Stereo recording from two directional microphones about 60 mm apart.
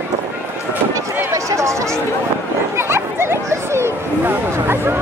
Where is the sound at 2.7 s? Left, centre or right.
Right.